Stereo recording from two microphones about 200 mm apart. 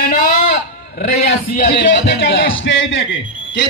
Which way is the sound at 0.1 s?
40° left (ahead or behind).